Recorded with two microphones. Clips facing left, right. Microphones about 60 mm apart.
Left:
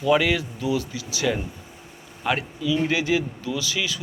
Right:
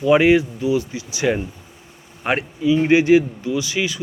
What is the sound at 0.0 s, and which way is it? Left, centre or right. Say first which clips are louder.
Speech: right 7 dB; right.